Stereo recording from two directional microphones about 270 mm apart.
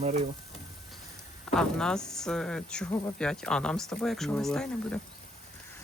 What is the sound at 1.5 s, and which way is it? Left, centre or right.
Speech, centre.